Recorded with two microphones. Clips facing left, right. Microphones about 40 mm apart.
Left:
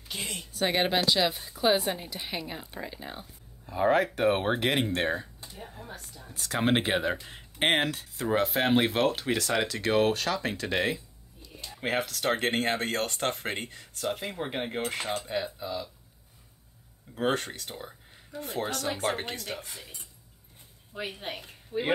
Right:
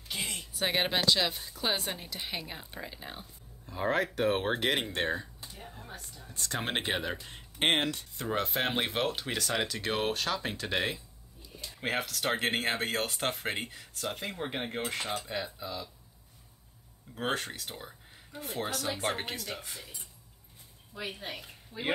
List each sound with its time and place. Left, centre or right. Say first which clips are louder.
0.1 s speech: even; centre
17.1 s speech: left 5 dB; centre
20.9 s a woman's voice: left 3 dB; left